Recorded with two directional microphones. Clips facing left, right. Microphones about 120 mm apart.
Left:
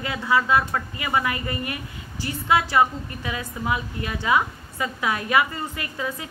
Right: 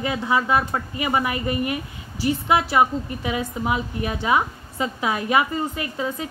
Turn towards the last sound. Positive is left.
turn(degrees=-25)  # may be behind; listen again after turning